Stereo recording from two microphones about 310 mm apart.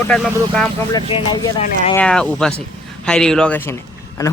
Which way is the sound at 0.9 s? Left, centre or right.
Centre.